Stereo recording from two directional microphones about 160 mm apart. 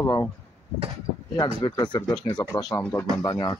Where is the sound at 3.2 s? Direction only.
25° left (ahead or behind).